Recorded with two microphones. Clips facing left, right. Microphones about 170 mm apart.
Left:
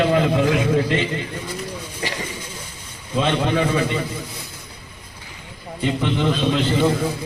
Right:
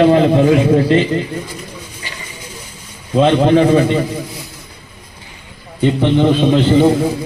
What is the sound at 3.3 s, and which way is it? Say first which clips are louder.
Speech: right 9 dB; 35° right (ahead or behind).